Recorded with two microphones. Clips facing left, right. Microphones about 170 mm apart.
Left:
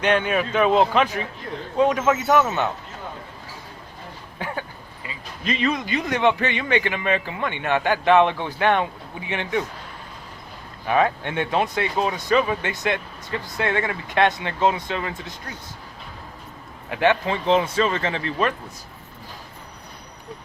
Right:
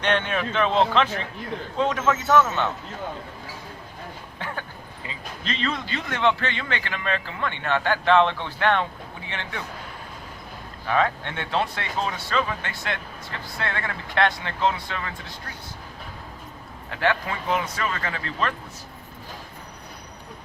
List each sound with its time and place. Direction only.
0.0 s a man's voice: 10° left (ahead or behind)
4.4 s a sound: 10° left (ahead or behind)
5.4 s a man's voice: 10° left (ahead or behind)
10.8 s a man's voice: 15° left (ahead or behind)
16.9 s a man's voice: 20° left (ahead or behind)